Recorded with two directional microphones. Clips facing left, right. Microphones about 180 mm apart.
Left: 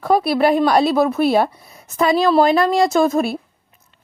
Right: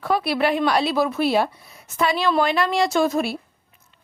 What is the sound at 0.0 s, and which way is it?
Speech, 40° left (ahead or behind).